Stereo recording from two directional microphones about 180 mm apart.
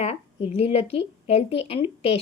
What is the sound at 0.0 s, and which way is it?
A woman's voice, 35° left (ahead or behind).